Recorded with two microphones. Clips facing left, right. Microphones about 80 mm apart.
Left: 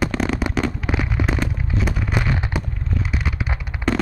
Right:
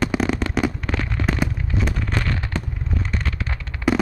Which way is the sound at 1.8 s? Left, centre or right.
Centre.